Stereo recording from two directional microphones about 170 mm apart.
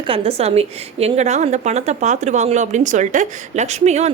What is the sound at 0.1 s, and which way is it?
A woman's voice, 35° right (ahead or behind).